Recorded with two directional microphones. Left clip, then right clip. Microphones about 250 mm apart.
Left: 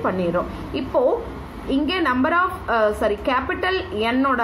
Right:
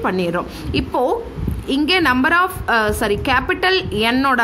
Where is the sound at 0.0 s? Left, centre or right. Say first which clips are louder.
Right 2 dB; right.